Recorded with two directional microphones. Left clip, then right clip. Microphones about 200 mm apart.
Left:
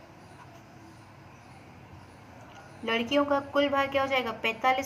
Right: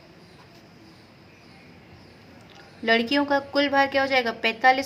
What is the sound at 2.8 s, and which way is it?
A woman's voice, 55° right (ahead or behind).